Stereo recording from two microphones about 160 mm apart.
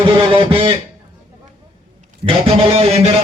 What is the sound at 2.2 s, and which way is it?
Speech, 40° right (ahead or behind).